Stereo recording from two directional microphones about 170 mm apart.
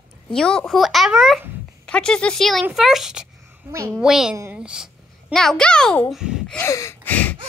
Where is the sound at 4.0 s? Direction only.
5° right (ahead or behind).